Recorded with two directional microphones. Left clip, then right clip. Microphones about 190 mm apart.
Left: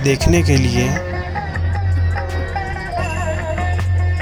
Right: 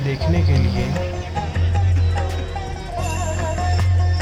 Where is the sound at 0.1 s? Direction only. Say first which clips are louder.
Left 8 dB; 65° left (ahead or behind).